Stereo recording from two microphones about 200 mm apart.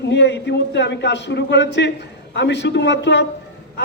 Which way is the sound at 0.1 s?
60° left (ahead or behind).